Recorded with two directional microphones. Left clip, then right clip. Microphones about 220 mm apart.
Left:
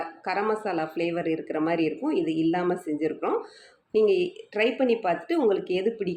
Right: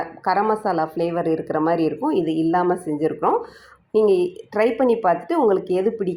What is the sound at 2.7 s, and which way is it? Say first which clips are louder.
Speech: right 5 dB; 5° left (ahead or behind).